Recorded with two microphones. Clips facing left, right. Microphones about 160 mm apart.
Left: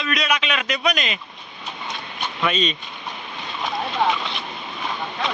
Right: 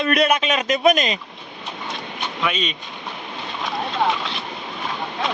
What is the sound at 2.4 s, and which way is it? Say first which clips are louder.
Speech: left 2 dB; 10° right (ahead or behind).